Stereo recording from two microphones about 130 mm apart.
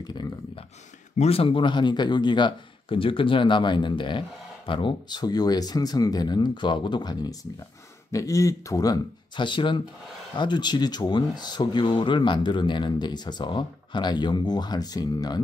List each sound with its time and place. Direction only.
0.0 s speech: 30° left (ahead or behind)
1.1 s speech: 50° left (ahead or behind); by 15.4 s 30° left (ahead or behind)